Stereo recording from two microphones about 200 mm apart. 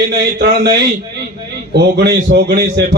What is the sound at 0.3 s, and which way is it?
A man's voice, 55° right (ahead or behind).